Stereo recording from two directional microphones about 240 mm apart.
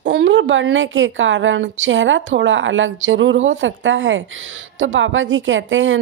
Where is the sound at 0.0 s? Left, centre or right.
Right.